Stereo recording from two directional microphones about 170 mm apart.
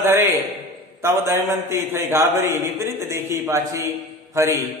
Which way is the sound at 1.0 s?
15° right (ahead or behind).